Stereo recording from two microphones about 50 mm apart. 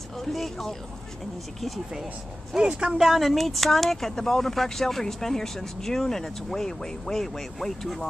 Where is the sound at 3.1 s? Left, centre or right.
Centre.